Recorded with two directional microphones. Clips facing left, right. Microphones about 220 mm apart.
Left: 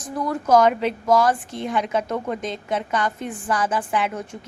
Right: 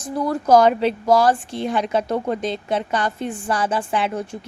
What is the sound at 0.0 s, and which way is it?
Speech, 30° right (ahead or behind).